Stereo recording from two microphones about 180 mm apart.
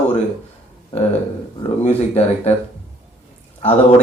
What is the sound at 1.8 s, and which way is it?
Speech, 40° left (ahead or behind).